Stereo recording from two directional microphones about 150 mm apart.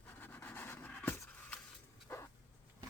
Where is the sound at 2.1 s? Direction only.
15° left (ahead or behind).